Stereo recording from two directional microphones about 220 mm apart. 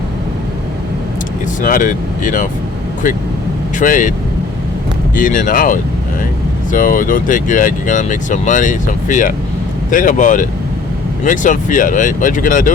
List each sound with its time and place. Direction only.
1.6 s speech: 35° left (ahead or behind)
3.8 s speech: 35° left (ahead or behind)
5.1 s speech: 35° left (ahead or behind)